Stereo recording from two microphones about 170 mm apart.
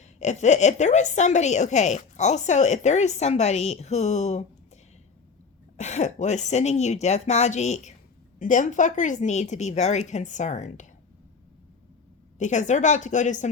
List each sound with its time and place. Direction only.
0.0 s a woman's voice: 45° left (ahead or behind)
5.7 s a woman's voice: 40° left (ahead or behind)
12.4 s a woman's voice: 45° left (ahead or behind)